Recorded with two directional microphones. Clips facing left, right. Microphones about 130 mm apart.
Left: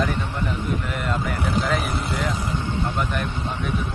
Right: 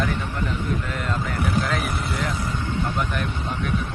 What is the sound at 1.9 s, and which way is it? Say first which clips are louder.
Speech: left 1 dB; 25° left (ahead or behind).